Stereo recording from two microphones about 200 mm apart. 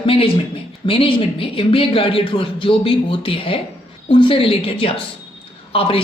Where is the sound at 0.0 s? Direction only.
25° left (ahead or behind).